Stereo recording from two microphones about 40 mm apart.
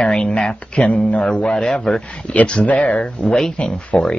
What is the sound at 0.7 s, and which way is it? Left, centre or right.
Speech, left.